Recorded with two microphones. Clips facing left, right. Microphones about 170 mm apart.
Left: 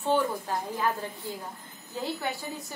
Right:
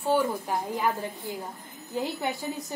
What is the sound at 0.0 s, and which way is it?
A woman's voice, 10° right (ahead or behind).